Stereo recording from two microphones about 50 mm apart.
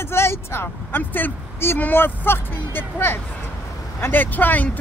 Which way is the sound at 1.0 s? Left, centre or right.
Left.